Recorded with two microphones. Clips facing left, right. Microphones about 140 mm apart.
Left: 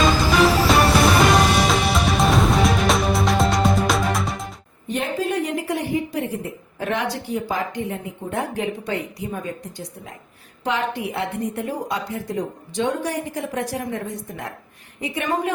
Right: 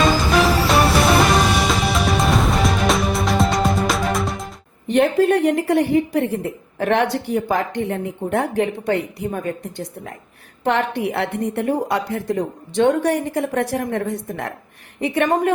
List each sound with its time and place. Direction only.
0.3 s music: centre (ahead or behind)
4.9 s a sound: 70° right (ahead or behind)
6.7 s a woman's voice: 65° right (ahead or behind)